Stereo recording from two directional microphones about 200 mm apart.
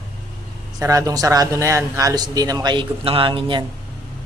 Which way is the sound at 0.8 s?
15° right (ahead or behind).